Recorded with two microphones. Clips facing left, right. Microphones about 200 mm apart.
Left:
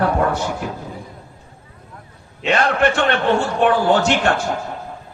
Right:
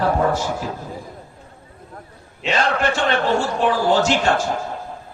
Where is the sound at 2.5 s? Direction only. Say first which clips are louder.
Left 3 dB; 60° left (ahead or behind).